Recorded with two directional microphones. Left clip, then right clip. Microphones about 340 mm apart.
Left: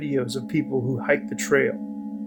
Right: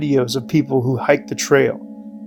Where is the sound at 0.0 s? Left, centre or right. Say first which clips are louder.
Right 8 dB; right.